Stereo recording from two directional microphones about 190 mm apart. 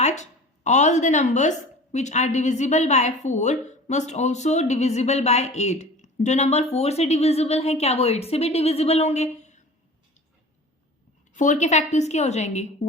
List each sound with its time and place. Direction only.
0.0 s a woman's voice: 35° left (ahead or behind)
11.3 s a woman's voice: 40° left (ahead or behind)